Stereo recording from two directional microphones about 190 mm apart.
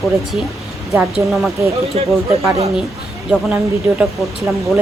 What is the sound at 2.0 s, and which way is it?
Speech, 30° right (ahead or behind).